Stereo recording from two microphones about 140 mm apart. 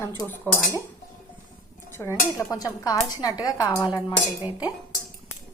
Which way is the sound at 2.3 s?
25° left (ahead or behind).